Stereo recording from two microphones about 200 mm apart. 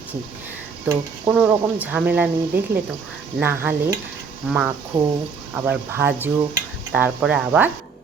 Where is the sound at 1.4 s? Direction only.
5° right (ahead or behind).